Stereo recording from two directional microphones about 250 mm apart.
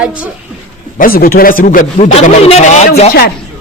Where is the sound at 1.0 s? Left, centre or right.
Left.